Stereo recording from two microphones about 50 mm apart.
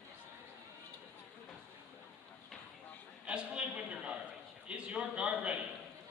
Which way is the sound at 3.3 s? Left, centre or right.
Right.